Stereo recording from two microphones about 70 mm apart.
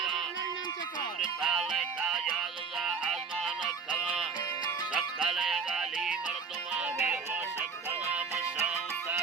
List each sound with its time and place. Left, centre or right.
1.4 s music: centre
6.7 s music: right